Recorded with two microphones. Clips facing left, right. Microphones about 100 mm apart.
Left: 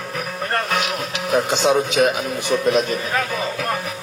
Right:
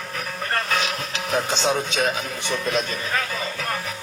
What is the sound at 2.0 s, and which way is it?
Speech, 30° left (ahead or behind).